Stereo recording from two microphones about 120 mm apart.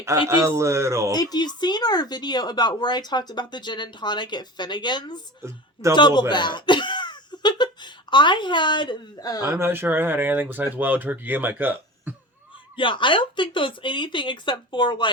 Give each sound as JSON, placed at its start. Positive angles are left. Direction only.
{"t": 0.0, "sound": "speech", "side_deg": -25}
{"t": 1.1, "sound": "speech", "side_deg": 35}
{"t": 5.4, "sound": "a woman's voice", "side_deg": -25}
{"t": 5.9, "sound": "speech", "side_deg": 40}
{"t": 9.4, "sound": "speech", "side_deg": -20}
{"t": 12.7, "sound": "speech", "side_deg": 45}